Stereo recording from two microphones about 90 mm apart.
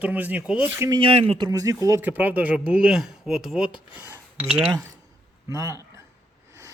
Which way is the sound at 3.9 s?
20° right (ahead or behind).